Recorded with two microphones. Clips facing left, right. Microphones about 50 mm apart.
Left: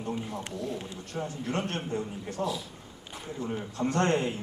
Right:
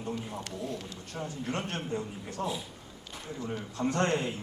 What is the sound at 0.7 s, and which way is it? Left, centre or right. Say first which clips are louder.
A man's voice: left 3 dB; centre.